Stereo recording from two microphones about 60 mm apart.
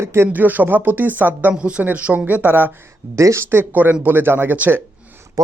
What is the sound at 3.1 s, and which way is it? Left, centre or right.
Speech, right.